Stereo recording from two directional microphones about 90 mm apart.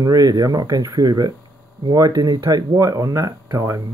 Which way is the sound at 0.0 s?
45° right (ahead or behind).